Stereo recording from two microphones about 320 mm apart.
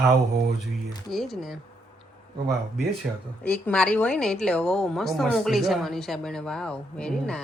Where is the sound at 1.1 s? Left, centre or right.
Centre.